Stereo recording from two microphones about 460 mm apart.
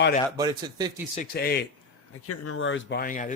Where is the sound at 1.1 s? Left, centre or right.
Centre.